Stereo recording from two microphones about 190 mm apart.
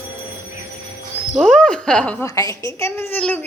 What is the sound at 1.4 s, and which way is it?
A child's voice, 5° left (ahead or behind).